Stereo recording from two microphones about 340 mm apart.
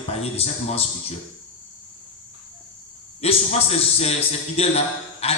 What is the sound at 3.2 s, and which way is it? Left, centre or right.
A man's voice, centre.